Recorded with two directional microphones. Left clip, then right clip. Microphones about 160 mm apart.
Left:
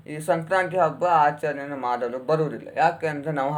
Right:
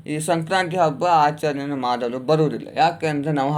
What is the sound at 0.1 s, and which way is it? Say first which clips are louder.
Speech: right 2 dB; 30° right (ahead or behind).